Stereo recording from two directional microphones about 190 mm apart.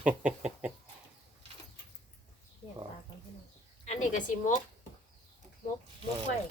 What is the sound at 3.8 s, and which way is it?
Speech, 40° left (ahead or behind).